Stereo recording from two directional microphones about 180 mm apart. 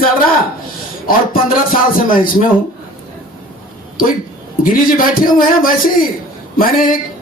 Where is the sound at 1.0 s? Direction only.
50° left (ahead or behind).